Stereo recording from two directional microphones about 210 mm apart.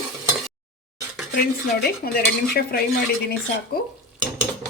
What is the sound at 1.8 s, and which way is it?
Dishes, 45° left (ahead or behind).